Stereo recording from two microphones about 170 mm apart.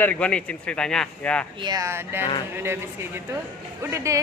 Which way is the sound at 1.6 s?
20° right (ahead or behind).